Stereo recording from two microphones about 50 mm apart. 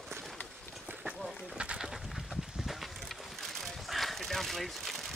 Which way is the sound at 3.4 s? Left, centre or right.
Centre.